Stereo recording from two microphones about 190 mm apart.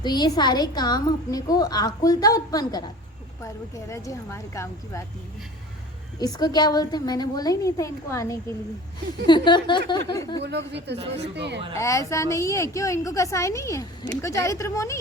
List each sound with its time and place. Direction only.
0.0 s a woman's voice: 20° left (ahead or behind)
6.1 s a woman's voice: 20° left (ahead or behind)
10.4 s a woman's voice: 65° right (ahead or behind)
11.8 s a woman's voice: 15° left (ahead or behind)